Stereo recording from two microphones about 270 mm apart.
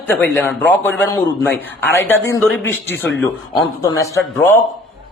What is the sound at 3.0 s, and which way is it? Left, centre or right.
Speech, left.